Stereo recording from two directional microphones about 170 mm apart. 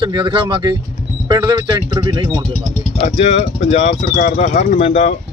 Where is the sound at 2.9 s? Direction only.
40° left (ahead or behind).